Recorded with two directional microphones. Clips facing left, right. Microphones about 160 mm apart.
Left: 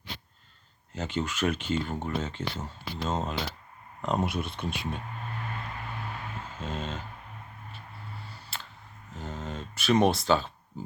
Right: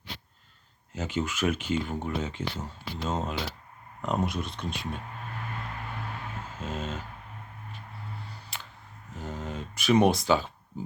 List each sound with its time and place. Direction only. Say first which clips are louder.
0.9 s speech: right 1 dB; 10° right (ahead or behind)
4.3 s speech: left 1 dB; 5° left (ahead or behind)
6.6 s speech: right 1 dB; 5° right (ahead or behind)
8.5 s a sound: left 1 dB; 15° right (ahead or behind)
9.1 s speech: right 1 dB; 10° right (ahead or behind)